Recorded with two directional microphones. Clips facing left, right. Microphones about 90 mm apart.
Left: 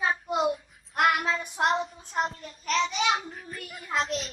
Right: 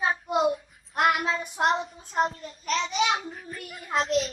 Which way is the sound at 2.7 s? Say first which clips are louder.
Even; 35° right (ahead or behind).